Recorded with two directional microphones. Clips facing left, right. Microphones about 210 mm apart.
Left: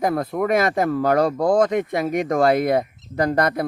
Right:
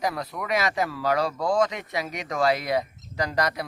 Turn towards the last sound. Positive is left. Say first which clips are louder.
# left 7 dB
turn(degrees=55)  # may be behind; listen again after turning